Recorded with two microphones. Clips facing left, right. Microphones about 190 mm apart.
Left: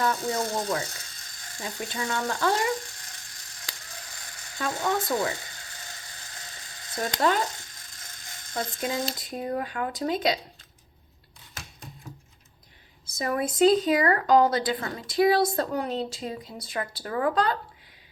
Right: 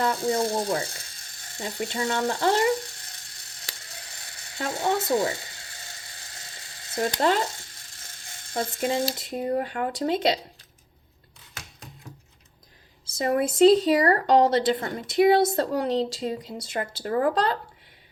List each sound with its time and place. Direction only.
0.0 s a sound: 30° right (ahead or behind)
4.0 s sizzle: 25° right (ahead or behind)
7.2 s speech: 25° right (ahead or behind)
13.1 s a woman's voice: 30° right (ahead or behind)